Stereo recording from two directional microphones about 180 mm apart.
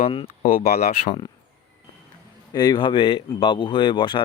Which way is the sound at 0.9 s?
35° left (ahead or behind).